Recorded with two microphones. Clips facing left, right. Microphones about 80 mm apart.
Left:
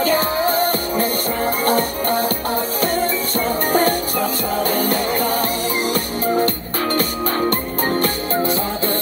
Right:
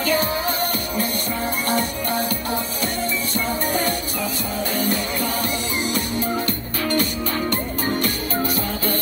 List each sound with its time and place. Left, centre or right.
0.0 s music: left